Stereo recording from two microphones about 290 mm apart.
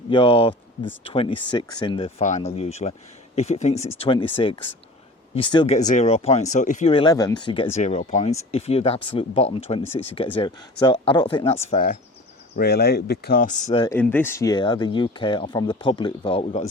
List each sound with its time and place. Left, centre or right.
0.1 s speech: centre
11.7 s speech: left